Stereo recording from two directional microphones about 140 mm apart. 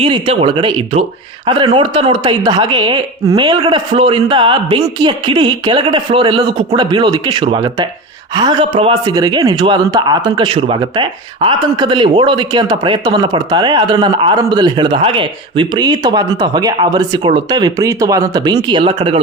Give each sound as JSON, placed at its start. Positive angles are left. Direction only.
{"t": 0.0, "sound": "a man's voice", "side_deg": -40}